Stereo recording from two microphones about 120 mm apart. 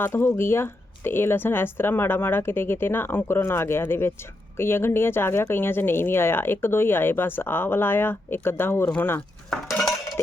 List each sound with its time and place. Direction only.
0.0 s speech: 20° left (ahead or behind)
9.5 s dishes: centre (ahead or behind)